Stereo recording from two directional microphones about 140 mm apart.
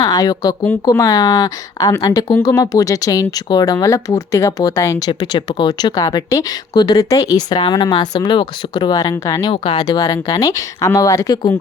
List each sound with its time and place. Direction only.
0.0 s speech: 25° left (ahead or behind)
9.5 s speech: 35° left (ahead or behind)